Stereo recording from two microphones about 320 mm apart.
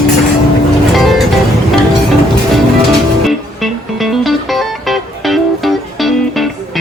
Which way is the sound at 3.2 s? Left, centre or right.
Centre.